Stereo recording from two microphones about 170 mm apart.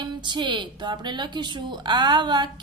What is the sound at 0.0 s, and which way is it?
Speech, 25° right (ahead or behind).